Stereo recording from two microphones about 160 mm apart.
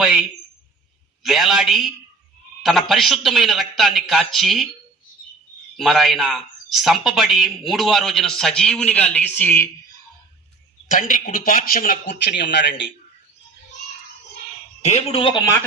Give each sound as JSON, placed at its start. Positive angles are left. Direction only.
{"t": 0.0, "sound": "speech", "side_deg": -5}
{"t": 2.9, "sound": "speech", "side_deg": 0}
{"t": 5.7, "sound": "speech", "side_deg": 0}
{"t": 10.8, "sound": "a man's voice", "side_deg": 55}
{"t": 14.8, "sound": "a man's voice", "side_deg": 45}